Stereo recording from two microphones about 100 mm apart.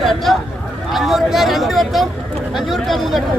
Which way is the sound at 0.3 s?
Centre (ahead or behind).